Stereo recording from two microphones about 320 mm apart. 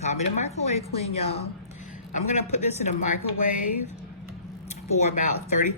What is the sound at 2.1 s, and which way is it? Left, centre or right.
A woman's voice, left.